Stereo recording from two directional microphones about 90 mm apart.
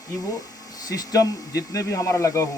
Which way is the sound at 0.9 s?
40° left (ahead or behind).